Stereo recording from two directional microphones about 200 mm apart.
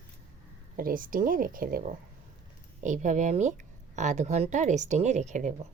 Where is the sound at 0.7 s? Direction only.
45° right (ahead or behind).